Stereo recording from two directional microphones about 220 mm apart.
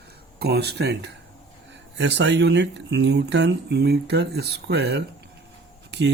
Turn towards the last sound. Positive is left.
turn(degrees=-55)  # may be behind; listen again after turning